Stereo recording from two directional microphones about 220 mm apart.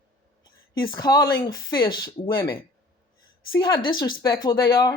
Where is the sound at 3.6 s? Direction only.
20° left (ahead or behind).